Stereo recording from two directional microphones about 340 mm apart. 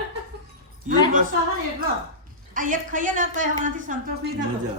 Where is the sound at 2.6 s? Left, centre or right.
Right.